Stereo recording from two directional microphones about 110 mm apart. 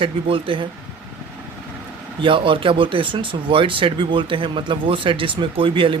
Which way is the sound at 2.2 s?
50° right (ahead or behind).